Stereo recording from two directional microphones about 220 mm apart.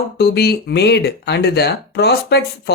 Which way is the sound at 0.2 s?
45° left (ahead or behind).